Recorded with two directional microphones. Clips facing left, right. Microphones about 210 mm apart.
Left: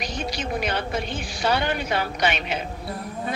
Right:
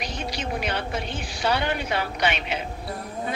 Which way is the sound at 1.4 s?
45° left (ahead or behind).